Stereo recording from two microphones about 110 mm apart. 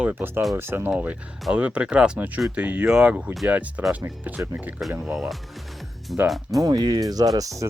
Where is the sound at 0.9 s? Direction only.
10° right (ahead or behind).